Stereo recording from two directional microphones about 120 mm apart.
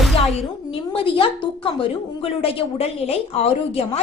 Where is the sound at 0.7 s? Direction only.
45° left (ahead or behind).